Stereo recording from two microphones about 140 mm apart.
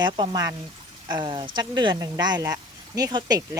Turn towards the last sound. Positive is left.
turn(degrees=-25)  # may be behind; listen again after turning